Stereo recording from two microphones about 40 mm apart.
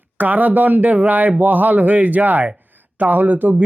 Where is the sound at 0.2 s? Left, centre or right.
Right.